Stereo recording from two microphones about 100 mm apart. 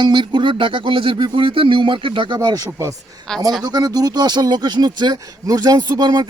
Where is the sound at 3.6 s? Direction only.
40° right (ahead or behind).